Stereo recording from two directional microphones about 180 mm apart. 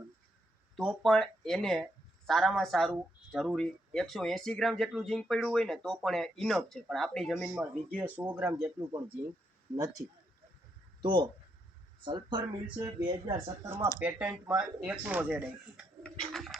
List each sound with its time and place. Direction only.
0.8 s speech: centre (ahead or behind); by 9.1 s 15° right (ahead or behind)
10.0 s speech: 60° right (ahead or behind)
11.0 s speech: 25° right (ahead or behind)
13.7 s speech: 15° right (ahead or behind)